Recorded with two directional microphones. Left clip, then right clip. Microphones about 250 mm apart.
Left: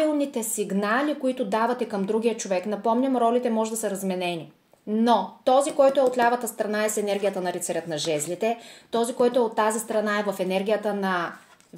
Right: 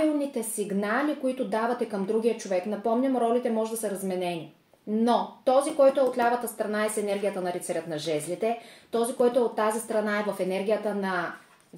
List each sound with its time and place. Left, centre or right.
0.3 s a woman's voice: left